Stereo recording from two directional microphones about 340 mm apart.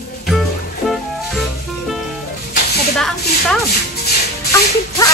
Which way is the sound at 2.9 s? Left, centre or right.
Centre.